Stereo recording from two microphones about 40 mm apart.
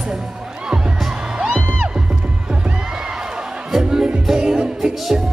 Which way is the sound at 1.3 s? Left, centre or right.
Right.